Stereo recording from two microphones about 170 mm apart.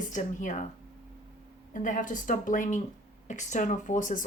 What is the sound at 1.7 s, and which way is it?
Speech, 50° left (ahead or behind).